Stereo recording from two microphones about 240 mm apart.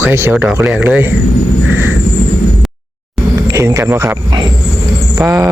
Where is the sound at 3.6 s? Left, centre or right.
Centre.